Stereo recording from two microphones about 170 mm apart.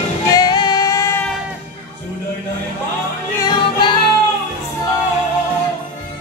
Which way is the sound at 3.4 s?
25° left (ahead or behind).